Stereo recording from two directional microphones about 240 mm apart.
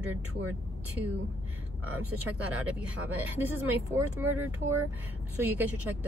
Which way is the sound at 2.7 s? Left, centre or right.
Centre.